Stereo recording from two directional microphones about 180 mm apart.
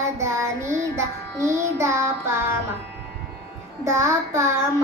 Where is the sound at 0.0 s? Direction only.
15° right (ahead or behind).